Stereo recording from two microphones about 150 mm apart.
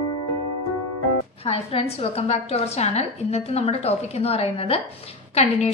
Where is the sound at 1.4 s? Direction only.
40° left (ahead or behind).